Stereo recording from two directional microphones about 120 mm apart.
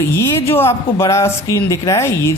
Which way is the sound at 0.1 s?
20° left (ahead or behind).